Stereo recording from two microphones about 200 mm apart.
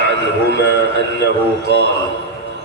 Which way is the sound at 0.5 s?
60° left (ahead or behind).